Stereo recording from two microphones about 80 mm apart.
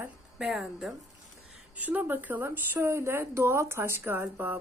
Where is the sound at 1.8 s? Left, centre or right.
Right.